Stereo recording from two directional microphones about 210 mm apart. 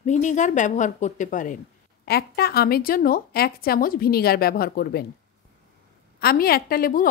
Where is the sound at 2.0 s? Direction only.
50° left (ahead or behind).